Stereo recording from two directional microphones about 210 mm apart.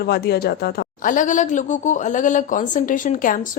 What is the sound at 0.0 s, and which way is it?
Speech, 50° left (ahead or behind).